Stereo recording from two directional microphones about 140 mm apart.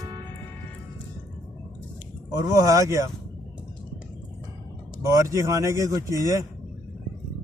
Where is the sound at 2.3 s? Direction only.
25° right (ahead or behind).